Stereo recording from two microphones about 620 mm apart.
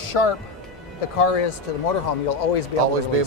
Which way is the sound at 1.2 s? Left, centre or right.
Left.